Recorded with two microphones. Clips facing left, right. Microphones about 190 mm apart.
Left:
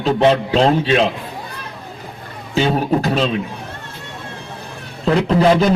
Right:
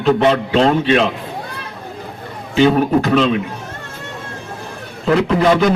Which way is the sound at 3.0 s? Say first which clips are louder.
Right 4 dB; 35° left (ahead or behind).